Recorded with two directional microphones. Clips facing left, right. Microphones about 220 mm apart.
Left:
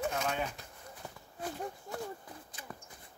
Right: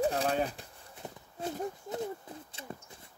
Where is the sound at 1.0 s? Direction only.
20° right (ahead or behind).